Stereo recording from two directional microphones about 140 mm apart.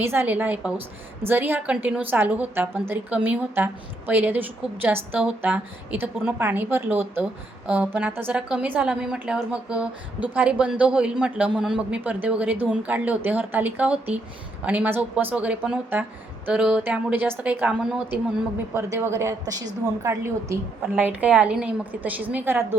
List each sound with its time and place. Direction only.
0.0 s a woman's voice: 15° right (ahead or behind)
18.7 s a woman's voice: 20° right (ahead or behind)